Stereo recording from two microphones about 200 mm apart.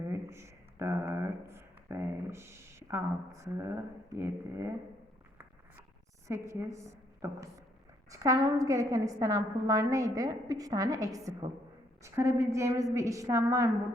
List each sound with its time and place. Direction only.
0.0 s speech: 15° right (ahead or behind)
6.2 s a woman's voice: 15° right (ahead or behind)
8.1 s a woman's voice: 15° right (ahead or behind)